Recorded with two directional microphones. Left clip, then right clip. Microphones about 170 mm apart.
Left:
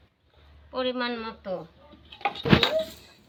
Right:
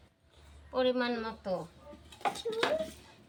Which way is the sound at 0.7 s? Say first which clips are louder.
Left 1 dB; 20° right (ahead or behind).